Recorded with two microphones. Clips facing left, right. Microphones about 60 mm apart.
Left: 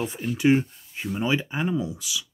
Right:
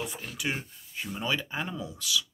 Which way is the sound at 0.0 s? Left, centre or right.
Left.